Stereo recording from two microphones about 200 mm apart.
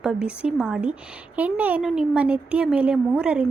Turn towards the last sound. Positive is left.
turn(degrees=-5)  # may be behind; listen again after turning